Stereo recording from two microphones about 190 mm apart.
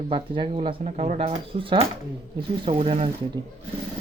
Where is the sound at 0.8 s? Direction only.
40° right (ahead or behind).